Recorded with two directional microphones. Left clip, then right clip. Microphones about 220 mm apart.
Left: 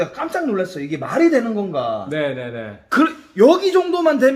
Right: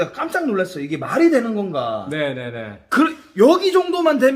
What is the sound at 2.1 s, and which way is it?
Speech, 15° right (ahead or behind).